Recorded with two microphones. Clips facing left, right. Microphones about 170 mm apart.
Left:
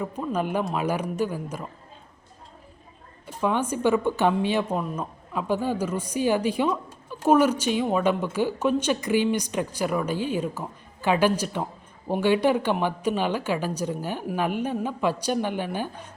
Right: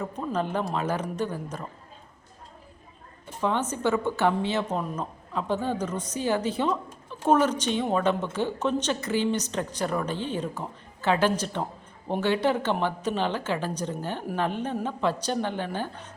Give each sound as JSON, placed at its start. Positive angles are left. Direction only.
{"t": 0.0, "sound": "a woman's voice", "side_deg": 10}
{"t": 3.4, "sound": "a woman's voice", "side_deg": 10}